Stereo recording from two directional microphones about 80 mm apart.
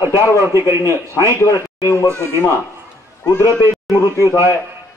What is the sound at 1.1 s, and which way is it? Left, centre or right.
Speech, left.